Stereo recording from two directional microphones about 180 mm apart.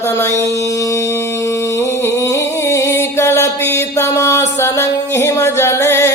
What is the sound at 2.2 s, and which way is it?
Music, 15° left (ahead or behind).